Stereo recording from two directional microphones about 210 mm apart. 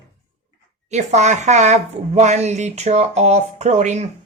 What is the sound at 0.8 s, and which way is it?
Speech, 35° right (ahead or behind).